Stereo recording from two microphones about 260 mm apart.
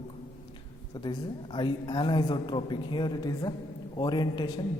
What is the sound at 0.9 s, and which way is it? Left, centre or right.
A man's voice, centre.